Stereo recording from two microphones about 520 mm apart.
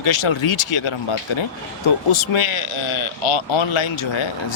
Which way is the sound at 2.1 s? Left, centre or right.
Left.